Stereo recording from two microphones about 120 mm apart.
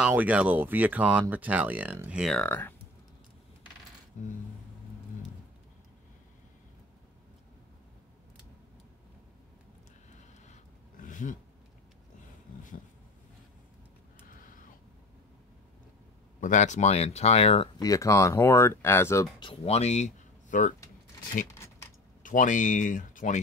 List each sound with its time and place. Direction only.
0.0 s speech: 10° right (ahead or behind)
2.3 s speech: 15° left (ahead or behind)
4.2 s music: 85° left
10.4 s a sound: 85° left
16.3 s speech: 85° left; by 17.6 s 60° left (ahead or behind)
17.7 s speech: 30° left (ahead or behind)
19.4 s speech: 60° left (ahead or behind); by 20.7 s 90° left
22.2 s speech: 90° left